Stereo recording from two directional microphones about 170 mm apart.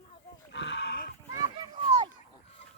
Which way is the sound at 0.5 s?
90° left.